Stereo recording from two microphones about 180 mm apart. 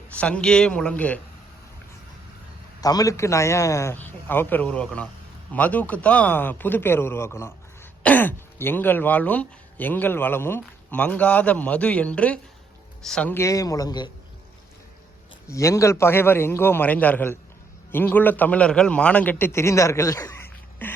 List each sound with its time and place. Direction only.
0.1 s speech: 5° left (ahead or behind)
2.8 s a man's voice: 20° left (ahead or behind)
15.4 s speech: 15° left (ahead or behind)